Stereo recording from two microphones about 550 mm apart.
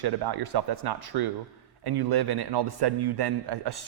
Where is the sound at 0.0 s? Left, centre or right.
Right.